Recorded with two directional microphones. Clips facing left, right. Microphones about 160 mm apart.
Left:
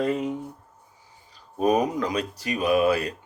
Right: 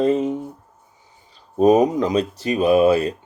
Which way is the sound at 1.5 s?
20° right (ahead or behind).